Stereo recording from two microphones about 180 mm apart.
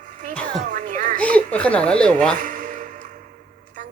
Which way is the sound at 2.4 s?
45° right (ahead or behind).